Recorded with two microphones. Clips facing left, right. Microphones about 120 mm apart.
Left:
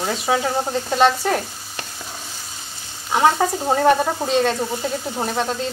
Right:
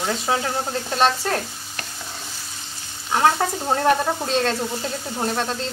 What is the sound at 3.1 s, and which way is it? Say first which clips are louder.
Speech: left 2 dB; 10° left (ahead or behind).